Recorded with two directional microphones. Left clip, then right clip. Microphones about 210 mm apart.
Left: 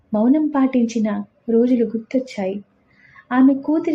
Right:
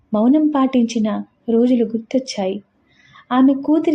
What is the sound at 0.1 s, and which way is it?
A woman's voice, 25° right (ahead or behind).